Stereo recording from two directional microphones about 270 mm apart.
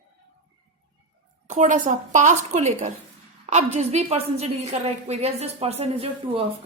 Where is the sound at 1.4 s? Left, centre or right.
Right.